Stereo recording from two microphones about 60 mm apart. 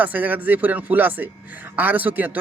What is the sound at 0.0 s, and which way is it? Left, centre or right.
Speech, right.